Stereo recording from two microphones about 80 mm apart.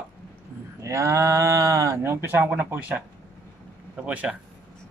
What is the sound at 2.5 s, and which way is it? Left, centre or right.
Speech, centre.